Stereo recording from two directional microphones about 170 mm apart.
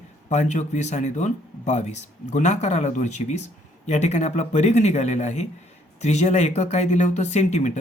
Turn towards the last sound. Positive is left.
turn(degrees=45)  # may be behind; listen again after turning